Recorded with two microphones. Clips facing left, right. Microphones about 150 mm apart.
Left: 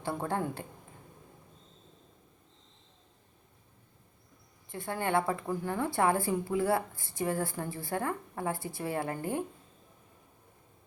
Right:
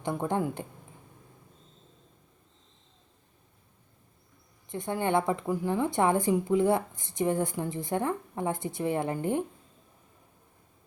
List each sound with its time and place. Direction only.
0.0 s a woman's voice: 20° right (ahead or behind)
4.7 s speech: 20° right (ahead or behind)